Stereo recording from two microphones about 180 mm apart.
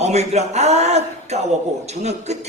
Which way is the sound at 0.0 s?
40° right (ahead or behind).